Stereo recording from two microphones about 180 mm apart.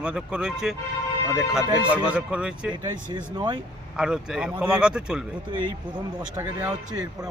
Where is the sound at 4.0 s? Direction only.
5° right (ahead or behind).